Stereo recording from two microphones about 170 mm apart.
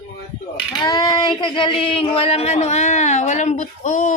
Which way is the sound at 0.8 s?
25° left (ahead or behind).